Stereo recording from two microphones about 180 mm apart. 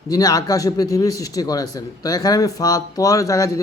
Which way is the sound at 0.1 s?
20° left (ahead or behind).